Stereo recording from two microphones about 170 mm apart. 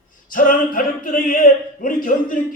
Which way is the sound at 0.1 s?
50° left (ahead or behind).